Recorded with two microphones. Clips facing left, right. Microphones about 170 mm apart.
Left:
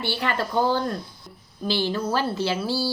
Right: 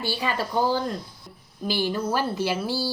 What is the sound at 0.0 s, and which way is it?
A woman's voice, 10° right (ahead or behind).